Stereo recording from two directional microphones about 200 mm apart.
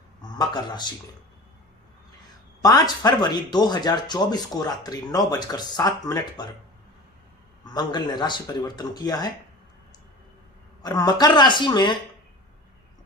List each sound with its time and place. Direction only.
0.2 s speech: 20° left (ahead or behind)
2.6 s speech: 20° left (ahead or behind)
7.6 s speech: 20° left (ahead or behind)
10.8 s speech: 20° left (ahead or behind)